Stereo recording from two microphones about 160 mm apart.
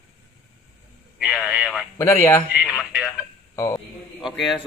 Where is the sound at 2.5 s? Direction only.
5° right (ahead or behind).